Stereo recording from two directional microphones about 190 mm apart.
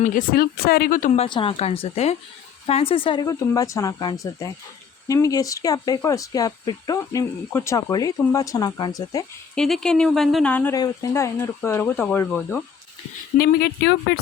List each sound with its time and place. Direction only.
0.0 s speech: 45° left (ahead or behind)
1.1 s speech: 30° left (ahead or behind)
3.2 s speech: 15° left (ahead or behind)
9.6 s speech: 5° left (ahead or behind)
10.8 s speech: 20° left (ahead or behind)
13.4 s speech: 60° left (ahead or behind)